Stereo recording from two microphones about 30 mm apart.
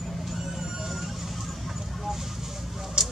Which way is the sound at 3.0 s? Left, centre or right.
Right.